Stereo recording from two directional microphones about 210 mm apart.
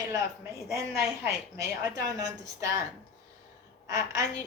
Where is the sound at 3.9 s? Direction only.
15° right (ahead or behind).